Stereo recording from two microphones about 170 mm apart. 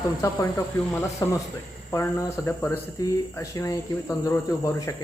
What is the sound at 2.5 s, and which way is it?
Speech, 15° left (ahead or behind).